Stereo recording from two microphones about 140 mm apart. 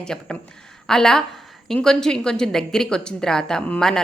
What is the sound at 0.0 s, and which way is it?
A woman's voice, 5° left (ahead or behind).